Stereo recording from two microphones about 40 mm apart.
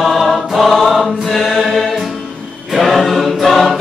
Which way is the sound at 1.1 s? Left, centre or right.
Centre.